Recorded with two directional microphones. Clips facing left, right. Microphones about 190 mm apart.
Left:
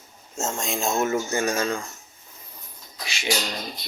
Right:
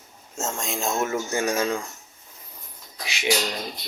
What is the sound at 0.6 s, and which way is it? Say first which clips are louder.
Speech: left 2 dB; centre (ahead or behind).